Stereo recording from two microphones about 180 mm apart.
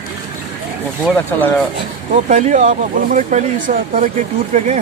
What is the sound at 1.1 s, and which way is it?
Speech, 10° left (ahead or behind).